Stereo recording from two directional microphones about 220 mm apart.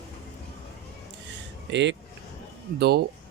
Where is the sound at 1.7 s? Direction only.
55° right (ahead or behind).